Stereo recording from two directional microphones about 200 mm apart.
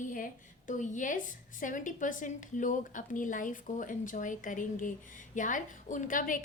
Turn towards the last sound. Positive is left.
turn(degrees=45)  # may be behind; listen again after turning